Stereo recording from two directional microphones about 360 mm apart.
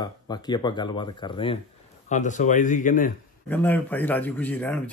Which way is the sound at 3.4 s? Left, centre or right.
Centre.